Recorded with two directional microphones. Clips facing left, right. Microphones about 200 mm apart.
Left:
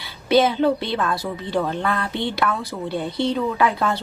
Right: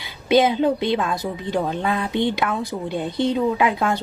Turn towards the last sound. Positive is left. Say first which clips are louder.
# right 1 dB
turn(degrees=-15)  # may be behind; listen again after turning